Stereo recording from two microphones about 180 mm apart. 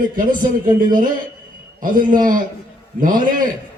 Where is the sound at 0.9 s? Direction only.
50° right (ahead or behind).